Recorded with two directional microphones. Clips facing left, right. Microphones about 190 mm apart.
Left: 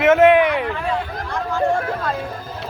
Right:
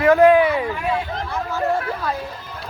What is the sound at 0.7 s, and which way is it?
Speech, 10° right (ahead or behind).